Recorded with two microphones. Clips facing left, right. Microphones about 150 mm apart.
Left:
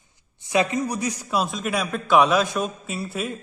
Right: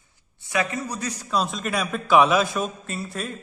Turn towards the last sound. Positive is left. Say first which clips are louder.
# left 2 dB
turn(degrees=5)  # may be behind; listen again after turning